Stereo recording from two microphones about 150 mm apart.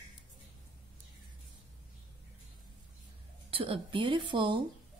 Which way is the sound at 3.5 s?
35° right (ahead or behind).